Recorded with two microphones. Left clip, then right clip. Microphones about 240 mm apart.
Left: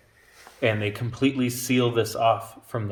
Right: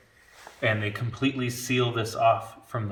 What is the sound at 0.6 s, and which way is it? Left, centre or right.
Speech, left.